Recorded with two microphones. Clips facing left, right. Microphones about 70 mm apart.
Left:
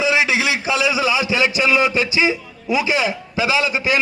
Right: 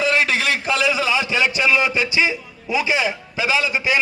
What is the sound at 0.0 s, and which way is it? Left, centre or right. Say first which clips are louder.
A man's voice: left 1 dB; centre.